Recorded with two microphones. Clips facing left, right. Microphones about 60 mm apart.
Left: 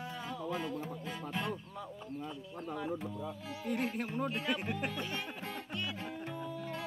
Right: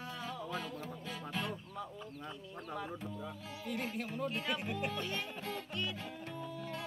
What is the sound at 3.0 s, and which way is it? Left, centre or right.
Music, centre.